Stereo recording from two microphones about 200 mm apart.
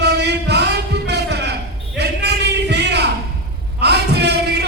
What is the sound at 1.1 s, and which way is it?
Music, 55° right (ahead or behind).